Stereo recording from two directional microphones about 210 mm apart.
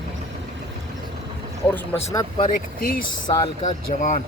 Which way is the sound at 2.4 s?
40° left (ahead or behind).